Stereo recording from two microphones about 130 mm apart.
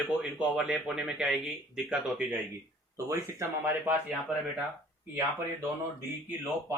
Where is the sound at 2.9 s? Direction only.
20° right (ahead or behind).